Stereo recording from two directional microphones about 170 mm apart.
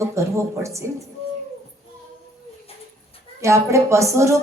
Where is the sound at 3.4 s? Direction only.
15° right (ahead or behind).